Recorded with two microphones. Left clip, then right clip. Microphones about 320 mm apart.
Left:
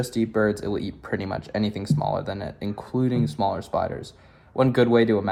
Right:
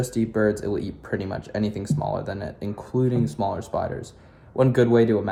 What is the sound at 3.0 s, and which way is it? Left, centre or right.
Speech, centre.